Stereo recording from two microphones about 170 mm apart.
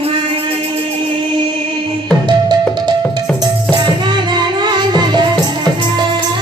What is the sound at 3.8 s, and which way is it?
Music, 25° right (ahead or behind).